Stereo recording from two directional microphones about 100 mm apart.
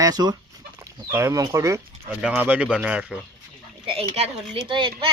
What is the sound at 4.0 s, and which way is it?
Speech, 85° right.